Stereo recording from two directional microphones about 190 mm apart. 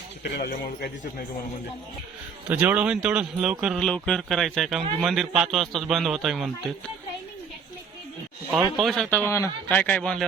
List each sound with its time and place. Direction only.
0.2 s a man's voice: 55° left (ahead or behind)
2.5 s speech: 10° right (ahead or behind)
8.5 s a man's voice: centre (ahead or behind)